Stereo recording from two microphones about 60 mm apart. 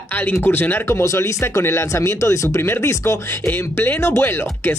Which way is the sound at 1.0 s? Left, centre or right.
Left.